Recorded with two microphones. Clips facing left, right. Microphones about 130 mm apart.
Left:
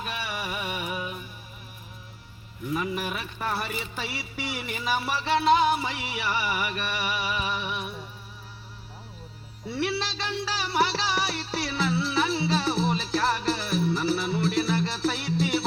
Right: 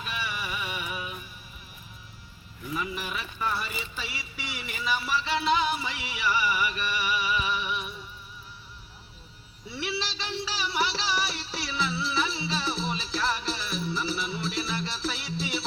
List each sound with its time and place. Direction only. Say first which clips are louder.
0.0 s music: left 2 dB; 45° left (ahead or behind)
2.7 s music: left 3 dB; 50° left (ahead or behind)
9.6 s music: left 5 dB; 50° left (ahead or behind)